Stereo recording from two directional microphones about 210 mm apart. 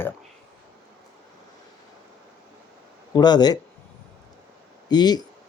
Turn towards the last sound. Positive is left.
turn(degrees=20)  # may be behind; listen again after turning